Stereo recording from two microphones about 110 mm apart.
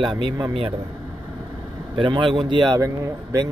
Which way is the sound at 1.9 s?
50° right (ahead or behind).